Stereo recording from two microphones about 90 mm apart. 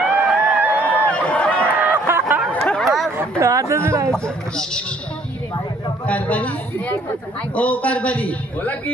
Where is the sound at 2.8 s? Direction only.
Centre (ahead or behind).